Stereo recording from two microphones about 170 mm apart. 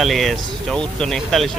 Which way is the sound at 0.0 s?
Centre (ahead or behind).